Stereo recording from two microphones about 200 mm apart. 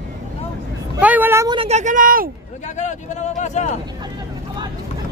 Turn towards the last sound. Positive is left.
turn(degrees=35)  # may be behind; listen again after turning